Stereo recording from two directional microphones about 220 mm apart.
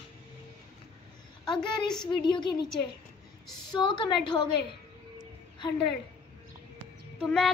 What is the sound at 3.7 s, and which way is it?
Speech, 20° left (ahead or behind).